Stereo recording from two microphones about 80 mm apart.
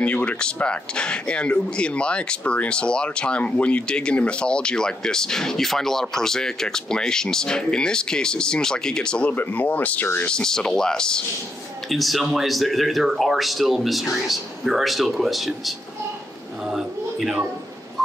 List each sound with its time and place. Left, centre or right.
0.0 s speech: centre
9.3 s speech: left
10.2 s speech: centre